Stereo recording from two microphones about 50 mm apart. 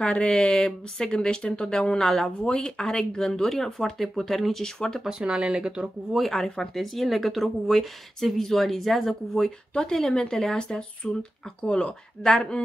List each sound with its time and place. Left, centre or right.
0.0 s speech: centre
5.0 s speech: centre
6.1 s speech: centre